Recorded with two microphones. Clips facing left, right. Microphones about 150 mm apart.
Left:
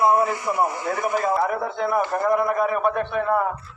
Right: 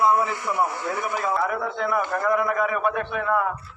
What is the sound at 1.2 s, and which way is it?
A man's voice, 40° left (ahead or behind).